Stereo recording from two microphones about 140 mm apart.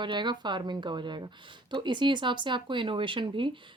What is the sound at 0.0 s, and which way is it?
Speech, 35° right (ahead or behind).